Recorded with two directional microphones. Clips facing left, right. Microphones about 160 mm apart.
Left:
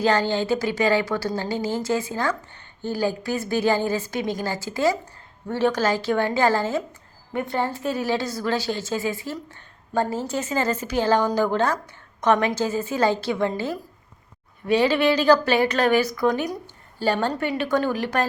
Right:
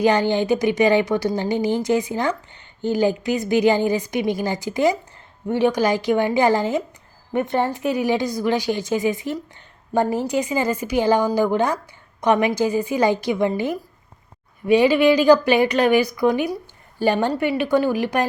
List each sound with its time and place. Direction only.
0.0 s a woman's voice: 15° right (ahead or behind)